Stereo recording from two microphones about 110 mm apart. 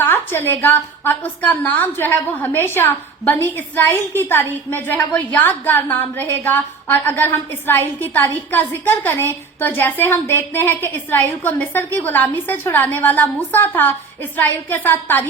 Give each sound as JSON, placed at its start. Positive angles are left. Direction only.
{"t": 0.0, "sound": "a woman's voice", "side_deg": 20}